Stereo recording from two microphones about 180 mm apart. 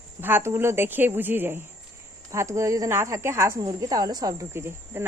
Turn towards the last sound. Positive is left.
turn(degrees=-15)  # may be behind; listen again after turning